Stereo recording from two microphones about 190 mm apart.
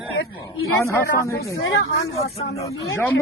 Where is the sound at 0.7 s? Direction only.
15° left (ahead or behind).